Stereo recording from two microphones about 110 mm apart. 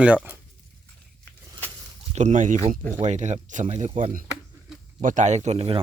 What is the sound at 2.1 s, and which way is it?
Speech, 90° right.